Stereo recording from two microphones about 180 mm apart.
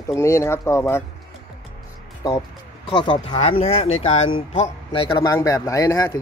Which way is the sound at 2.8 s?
30° left (ahead or behind).